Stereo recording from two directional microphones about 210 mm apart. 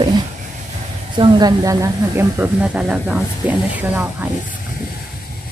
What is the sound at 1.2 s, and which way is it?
Speech, 20° right (ahead or behind).